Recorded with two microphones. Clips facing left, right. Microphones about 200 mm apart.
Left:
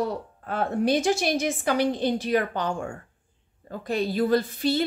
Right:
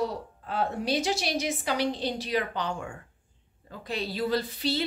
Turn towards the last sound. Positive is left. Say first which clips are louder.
# left 5 dB
turn(degrees=50)  # may be behind; listen again after turning